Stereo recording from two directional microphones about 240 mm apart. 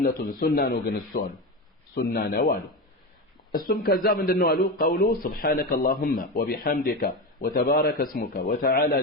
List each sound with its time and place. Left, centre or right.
0.0 s a man's voice: left